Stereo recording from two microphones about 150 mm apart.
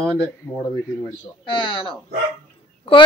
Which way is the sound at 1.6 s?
30° left (ahead or behind).